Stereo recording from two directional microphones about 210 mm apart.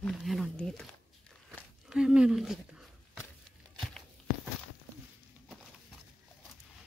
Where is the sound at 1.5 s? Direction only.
5° right (ahead or behind).